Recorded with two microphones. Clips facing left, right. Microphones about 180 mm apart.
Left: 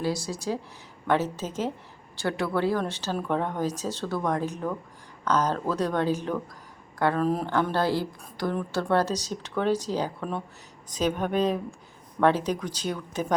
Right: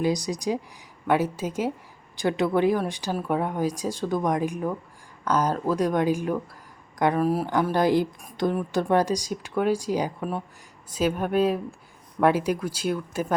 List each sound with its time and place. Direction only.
0.0 s a woman's voice: 15° right (ahead or behind)